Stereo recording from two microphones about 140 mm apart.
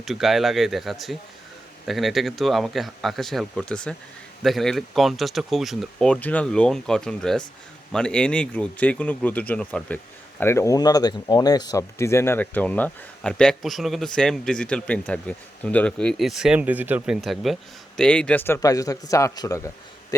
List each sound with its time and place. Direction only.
0.0 s speech: centre (ahead or behind)
10.4 s speech: 20° left (ahead or behind); by 17.2 s 10° right (ahead or behind)
17.2 s speech: centre (ahead or behind); by 20.1 s 20° left (ahead or behind)